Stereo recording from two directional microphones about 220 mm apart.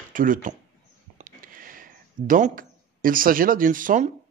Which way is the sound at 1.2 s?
40° right (ahead or behind).